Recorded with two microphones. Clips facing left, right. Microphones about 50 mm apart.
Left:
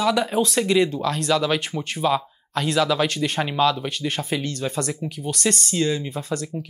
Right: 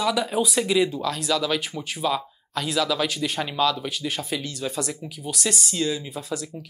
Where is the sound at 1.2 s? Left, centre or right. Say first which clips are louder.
Left 3 dB; centre.